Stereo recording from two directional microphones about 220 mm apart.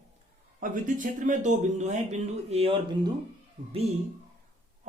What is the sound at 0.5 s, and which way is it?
Speech, 40° right (ahead or behind).